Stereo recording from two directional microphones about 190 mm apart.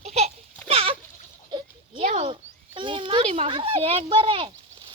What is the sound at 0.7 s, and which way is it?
Goat, 30° right (ahead or behind).